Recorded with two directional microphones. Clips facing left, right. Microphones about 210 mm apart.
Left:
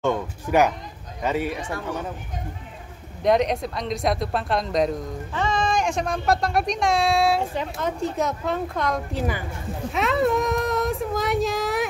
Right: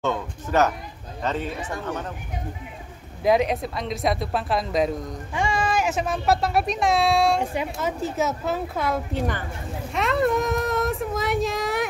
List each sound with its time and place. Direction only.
0.0 s a man's voice: 10° left (ahead or behind)
3.2 s speech: 5° right (ahead or behind)
9.9 s a sound: centre (ahead or behind)